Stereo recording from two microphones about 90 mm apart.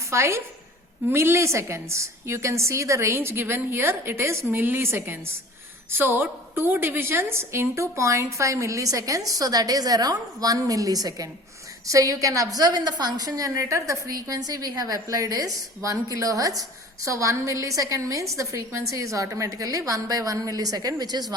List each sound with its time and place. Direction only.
0.1 s a woman's voice: 30° right (ahead or behind); by 21.3 s 45° right (ahead or behind)